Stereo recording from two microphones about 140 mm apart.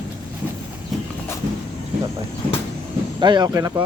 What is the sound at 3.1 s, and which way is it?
Speech, 35° right (ahead or behind).